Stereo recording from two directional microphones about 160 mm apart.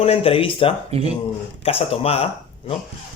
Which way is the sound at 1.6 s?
35° left (ahead or behind).